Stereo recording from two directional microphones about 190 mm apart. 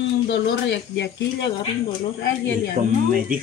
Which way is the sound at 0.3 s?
70° left (ahead or behind).